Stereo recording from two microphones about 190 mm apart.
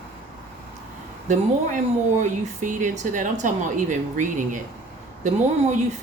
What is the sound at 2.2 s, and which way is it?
A woman's voice, 40° right (ahead or behind).